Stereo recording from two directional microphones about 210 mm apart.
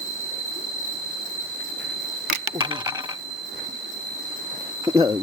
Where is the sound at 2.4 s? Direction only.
20° right (ahead or behind).